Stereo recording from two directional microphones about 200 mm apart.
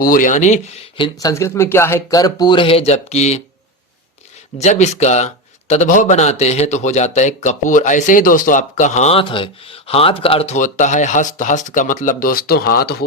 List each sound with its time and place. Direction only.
0.0 s speech: 45° left (ahead or behind)
0.9 s speech: 20° left (ahead or behind)
4.6 s speech: 35° left (ahead or behind)